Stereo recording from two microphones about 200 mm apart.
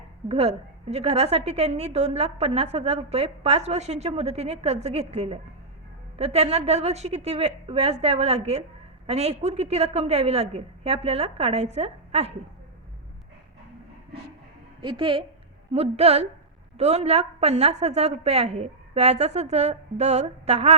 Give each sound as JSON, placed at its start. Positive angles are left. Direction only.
{"t": 0.3, "sound": "a woman's voice", "side_deg": -30}
{"t": 14.8, "sound": "a woman's voice", "side_deg": -25}